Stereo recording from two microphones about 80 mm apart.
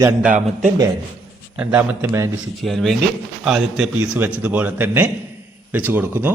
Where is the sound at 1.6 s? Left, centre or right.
Right.